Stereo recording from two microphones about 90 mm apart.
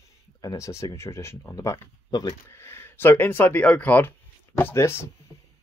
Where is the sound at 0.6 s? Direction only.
35° left (ahead or behind).